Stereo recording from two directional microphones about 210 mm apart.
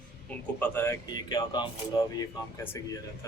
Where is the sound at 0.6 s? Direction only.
10° left (ahead or behind).